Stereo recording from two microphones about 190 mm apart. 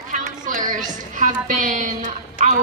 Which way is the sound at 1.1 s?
45° right (ahead or behind).